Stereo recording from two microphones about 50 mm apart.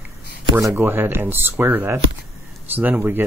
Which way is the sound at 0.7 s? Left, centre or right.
Right.